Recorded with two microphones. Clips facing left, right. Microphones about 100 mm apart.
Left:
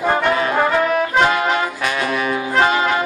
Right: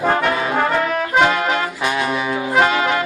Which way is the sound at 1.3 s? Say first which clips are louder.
Left 1 dB; 20° left (ahead or behind).